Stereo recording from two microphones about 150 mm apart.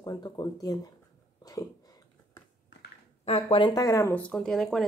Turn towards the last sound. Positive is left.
turn(degrees=0)  # may be behind; listen again after turning